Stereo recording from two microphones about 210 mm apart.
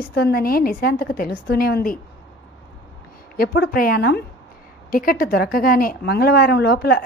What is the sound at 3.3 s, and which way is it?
A woman's voice, 50° left (ahead or behind).